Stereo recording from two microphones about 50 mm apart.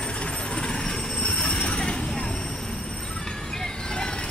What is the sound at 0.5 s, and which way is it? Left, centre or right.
Train, centre.